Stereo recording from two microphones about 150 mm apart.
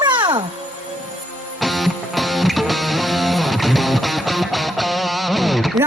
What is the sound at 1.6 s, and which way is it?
Music, centre (ahead or behind).